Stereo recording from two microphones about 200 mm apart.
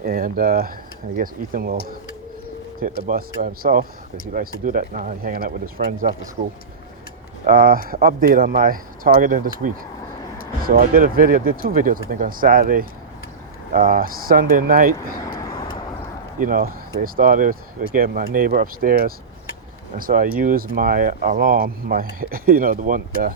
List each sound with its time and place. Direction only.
0.1 s speech: 45° right (ahead or behind)
2.8 s speech: 45° right (ahead or behind)
7.4 s speech: 45° right (ahead or behind)
15.4 s vehicle: 15° left (ahead or behind)
16.4 s speech: 45° right (ahead or behind)